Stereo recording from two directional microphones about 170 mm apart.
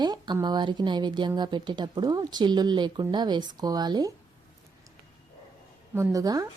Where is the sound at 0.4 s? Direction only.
25° right (ahead or behind).